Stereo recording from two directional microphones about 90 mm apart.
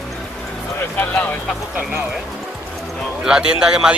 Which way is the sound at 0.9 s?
15° left (ahead or behind).